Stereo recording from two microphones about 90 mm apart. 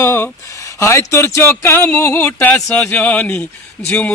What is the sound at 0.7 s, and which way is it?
A man's voice, 30° left (ahead or behind).